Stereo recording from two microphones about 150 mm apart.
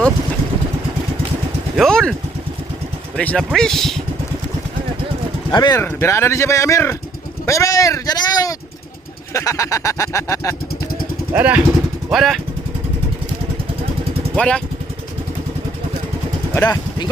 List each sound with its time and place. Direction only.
1.7 s speech: 5° left (ahead or behind)
3.2 s speech: 5° left (ahead or behind)
5.5 s a sound: 30° left (ahead or behind)
5.8 s a sound: 15° left (ahead or behind)
11.3 s speech: 10° right (ahead or behind)
14.3 s speech: 5° left (ahead or behind)